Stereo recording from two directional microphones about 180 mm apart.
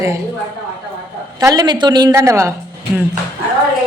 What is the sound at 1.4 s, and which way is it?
A woman's voice, 20° right (ahead or behind).